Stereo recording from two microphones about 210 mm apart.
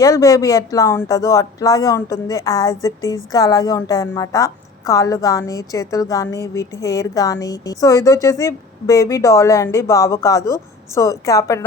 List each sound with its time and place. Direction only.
0.0 s a woman's voice: 15° left (ahead or behind)